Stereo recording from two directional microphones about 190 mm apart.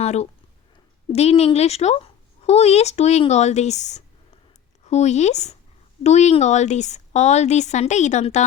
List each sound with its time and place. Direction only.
0.0 s speech: 35° left (ahead or behind)